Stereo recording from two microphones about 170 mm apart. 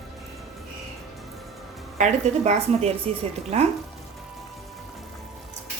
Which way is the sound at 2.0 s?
45° right (ahead or behind).